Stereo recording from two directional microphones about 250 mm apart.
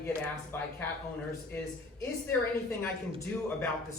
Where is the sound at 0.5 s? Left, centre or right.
Centre.